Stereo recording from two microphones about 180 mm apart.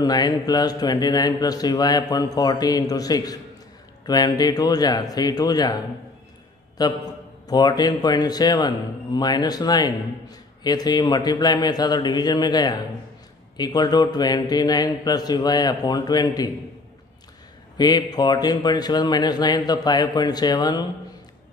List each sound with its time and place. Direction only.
0.0 s speech: 20° left (ahead or behind)
6.8 s speech: 20° left (ahead or behind)
17.7 s speech: 25° left (ahead or behind)